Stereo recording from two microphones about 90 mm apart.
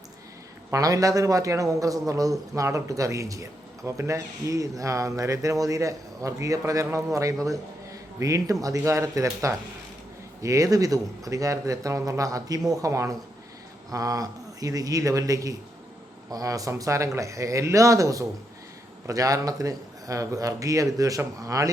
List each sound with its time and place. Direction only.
0.7 s a man's voice: 40° right (ahead or behind)